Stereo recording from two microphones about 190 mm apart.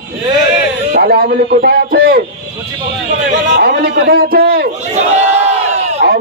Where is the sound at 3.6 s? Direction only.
55° right (ahead or behind).